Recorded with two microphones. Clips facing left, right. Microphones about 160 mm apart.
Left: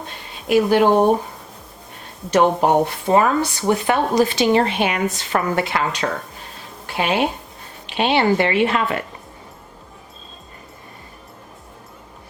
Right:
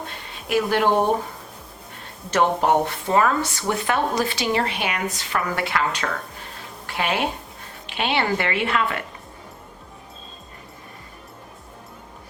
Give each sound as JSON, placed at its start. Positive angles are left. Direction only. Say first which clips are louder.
{"t": 0.4, "sound": "speech", "louder": "left 5 dB", "side_deg": 20}
{"t": 2.3, "sound": "speech", "louder": "left 4 dB", "side_deg": 20}